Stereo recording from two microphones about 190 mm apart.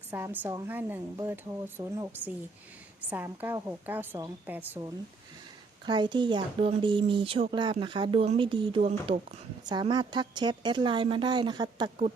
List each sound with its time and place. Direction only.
0.1 s speech: 10° right (ahead or behind)
5.8 s speech: 25° right (ahead or behind)
9.6 s speech: 20° right (ahead or behind)